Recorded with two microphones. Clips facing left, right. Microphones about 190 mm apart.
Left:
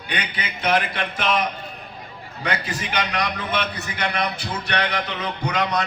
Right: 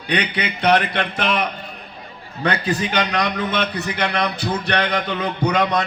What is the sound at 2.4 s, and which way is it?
A man's voice, 60° right (ahead or behind).